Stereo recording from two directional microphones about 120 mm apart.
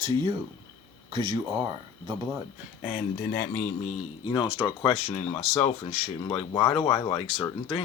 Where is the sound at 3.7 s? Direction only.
70° left (ahead or behind).